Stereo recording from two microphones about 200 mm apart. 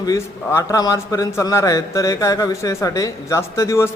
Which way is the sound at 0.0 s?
15° left (ahead or behind).